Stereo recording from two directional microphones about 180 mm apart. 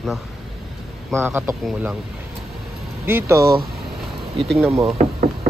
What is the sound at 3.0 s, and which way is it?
Speech, 15° right (ahead or behind).